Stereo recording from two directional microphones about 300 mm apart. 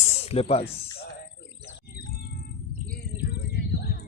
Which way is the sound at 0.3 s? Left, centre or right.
Left.